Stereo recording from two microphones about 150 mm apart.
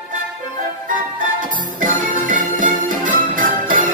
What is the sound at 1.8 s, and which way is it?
Music, 60° right (ahead or behind).